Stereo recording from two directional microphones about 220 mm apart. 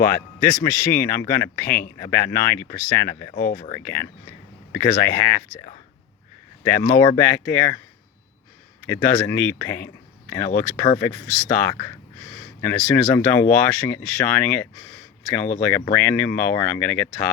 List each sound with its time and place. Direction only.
0.0 s speech: 15° left (ahead or behind)
6.7 s speech: 10° left (ahead or behind)
8.9 s speech: 10° left (ahead or behind)